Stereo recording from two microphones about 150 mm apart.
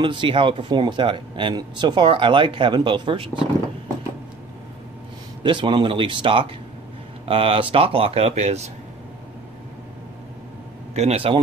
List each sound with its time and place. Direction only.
0.0 s speech: 35° right (ahead or behind)
5.4 s speech: 30° right (ahead or behind); by 8.6 s 50° right (ahead or behind)
11.0 s speech: 45° right (ahead or behind)